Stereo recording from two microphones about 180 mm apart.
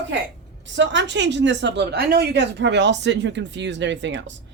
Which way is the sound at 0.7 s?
90° right.